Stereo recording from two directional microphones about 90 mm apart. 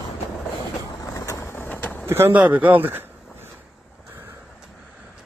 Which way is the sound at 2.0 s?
25° right (ahead or behind).